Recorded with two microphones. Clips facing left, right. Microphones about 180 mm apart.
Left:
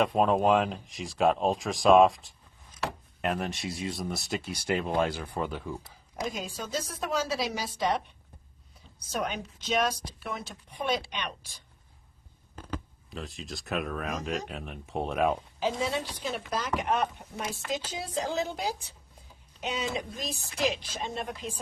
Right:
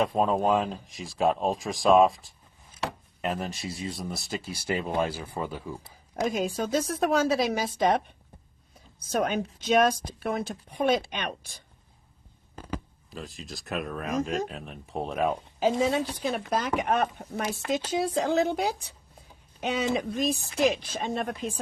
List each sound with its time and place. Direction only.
0.3 s speech: centre (ahead or behind)
6.3 s speech: 55° right (ahead or behind)
9.0 s speech: 50° right (ahead or behind)
12.5 s speech: 10° right (ahead or behind)
15.6 s speech: 50° right (ahead or behind)